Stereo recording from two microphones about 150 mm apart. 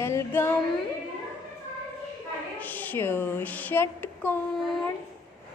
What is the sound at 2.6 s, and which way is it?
A woman's voice, 10° left (ahead or behind).